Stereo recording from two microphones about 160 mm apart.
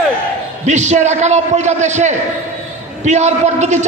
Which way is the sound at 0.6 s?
45° right (ahead or behind).